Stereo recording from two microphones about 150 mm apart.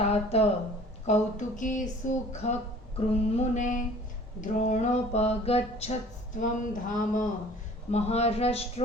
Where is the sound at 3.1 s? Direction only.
45° left (ahead or behind).